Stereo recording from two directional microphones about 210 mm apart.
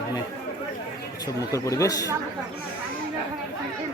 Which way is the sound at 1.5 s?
15° left (ahead or behind).